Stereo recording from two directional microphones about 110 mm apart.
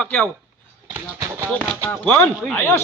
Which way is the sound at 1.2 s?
25° right (ahead or behind).